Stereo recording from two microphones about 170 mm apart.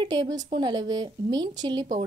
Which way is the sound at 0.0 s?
25° right (ahead or behind).